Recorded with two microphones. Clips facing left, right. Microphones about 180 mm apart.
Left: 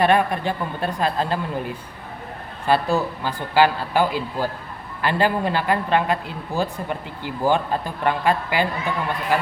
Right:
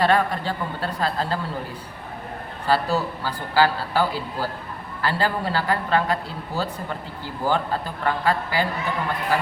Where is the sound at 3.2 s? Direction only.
20° left (ahead or behind).